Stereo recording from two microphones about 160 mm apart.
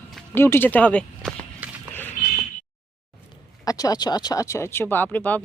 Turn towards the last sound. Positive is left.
turn(degrees=10)  # may be behind; listen again after turning